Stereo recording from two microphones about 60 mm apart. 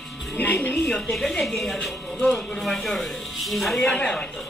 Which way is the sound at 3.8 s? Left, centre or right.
Centre.